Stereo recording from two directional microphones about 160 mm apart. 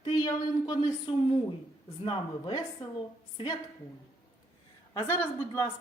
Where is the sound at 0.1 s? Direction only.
25° left (ahead or behind).